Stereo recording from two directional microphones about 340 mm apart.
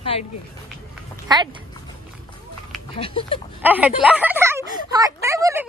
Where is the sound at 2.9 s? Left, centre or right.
Centre.